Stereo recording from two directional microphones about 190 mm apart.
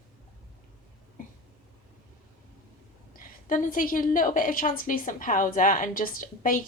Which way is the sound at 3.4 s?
45° left (ahead or behind).